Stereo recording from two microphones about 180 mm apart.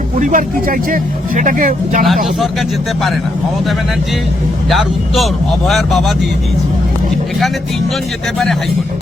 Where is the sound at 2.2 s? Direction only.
Centre (ahead or behind).